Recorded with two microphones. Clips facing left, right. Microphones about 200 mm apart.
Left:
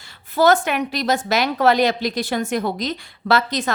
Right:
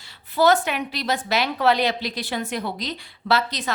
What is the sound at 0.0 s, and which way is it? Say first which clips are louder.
A woman's voice: left 2 dB; 45° left (ahead or behind).